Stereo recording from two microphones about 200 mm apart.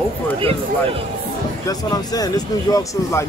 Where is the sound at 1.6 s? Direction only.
20° left (ahead or behind).